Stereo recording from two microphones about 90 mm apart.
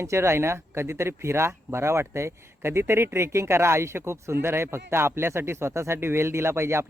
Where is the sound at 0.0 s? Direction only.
30° right (ahead or behind).